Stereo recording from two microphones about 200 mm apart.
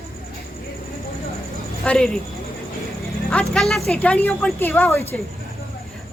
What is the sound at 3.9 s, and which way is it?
A woman's voice, 5° left (ahead or behind).